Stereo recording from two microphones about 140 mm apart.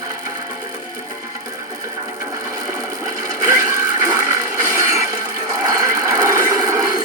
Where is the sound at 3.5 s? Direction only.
25° right (ahead or behind).